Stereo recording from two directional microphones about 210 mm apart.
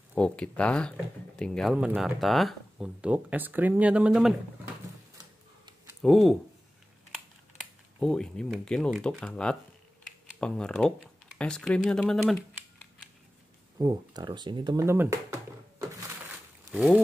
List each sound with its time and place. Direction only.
0.1 s speech: 5° left (ahead or behind)
6.0 s speech: centre (ahead or behind)
8.0 s speech: 5° left (ahead or behind)
13.7 s speech: 20° right (ahead or behind)
16.7 s speech: centre (ahead or behind)